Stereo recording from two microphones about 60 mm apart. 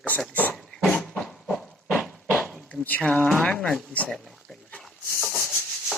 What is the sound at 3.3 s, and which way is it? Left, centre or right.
Speech, centre.